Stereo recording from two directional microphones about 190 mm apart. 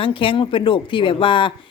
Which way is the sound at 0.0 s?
25° left (ahead or behind).